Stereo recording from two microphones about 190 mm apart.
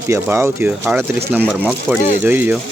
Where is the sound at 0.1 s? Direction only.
15° right (ahead or behind).